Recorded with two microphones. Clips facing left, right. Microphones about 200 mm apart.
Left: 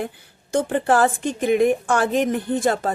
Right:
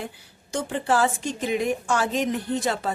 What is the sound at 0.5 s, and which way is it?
A woman's voice, 55° left (ahead or behind).